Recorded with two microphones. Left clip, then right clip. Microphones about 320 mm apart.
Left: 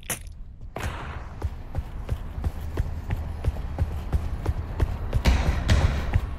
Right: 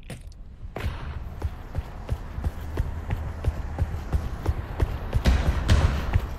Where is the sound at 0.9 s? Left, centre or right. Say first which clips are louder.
Left 4 dB; centre.